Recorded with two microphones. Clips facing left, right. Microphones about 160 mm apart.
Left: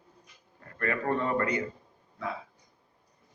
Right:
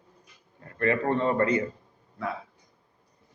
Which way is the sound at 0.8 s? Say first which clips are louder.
Right 4 dB; 25° right (ahead or behind).